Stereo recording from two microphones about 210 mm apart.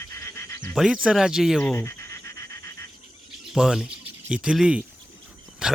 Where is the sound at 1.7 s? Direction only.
10° left (ahead or behind).